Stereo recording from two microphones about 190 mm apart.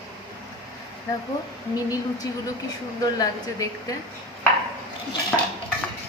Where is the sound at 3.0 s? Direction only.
20° left (ahead or behind).